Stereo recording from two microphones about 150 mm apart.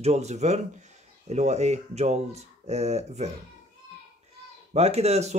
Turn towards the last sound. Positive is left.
turn(degrees=-45)  # may be behind; listen again after turning